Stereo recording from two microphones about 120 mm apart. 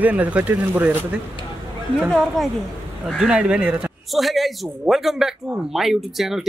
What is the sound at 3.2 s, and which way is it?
A man's voice, 10° right (ahead or behind).